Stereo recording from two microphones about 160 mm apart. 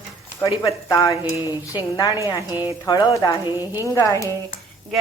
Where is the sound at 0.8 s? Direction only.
20° left (ahead or behind).